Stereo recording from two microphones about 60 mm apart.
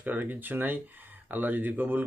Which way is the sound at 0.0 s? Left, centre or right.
Right.